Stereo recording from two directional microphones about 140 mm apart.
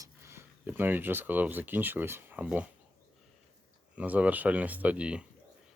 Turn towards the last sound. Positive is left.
turn(degrees=-5)  # may be behind; listen again after turning